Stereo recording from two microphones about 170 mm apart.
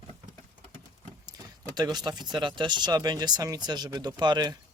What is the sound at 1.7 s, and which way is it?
Speech, 25° right (ahead or behind).